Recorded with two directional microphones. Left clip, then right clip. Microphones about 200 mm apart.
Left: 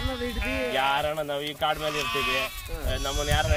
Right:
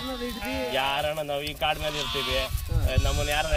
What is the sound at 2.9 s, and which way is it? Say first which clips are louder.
Speech: even; 20° right (ahead or behind).